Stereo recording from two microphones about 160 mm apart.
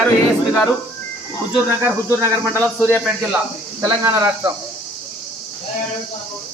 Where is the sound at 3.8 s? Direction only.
15° right (ahead or behind).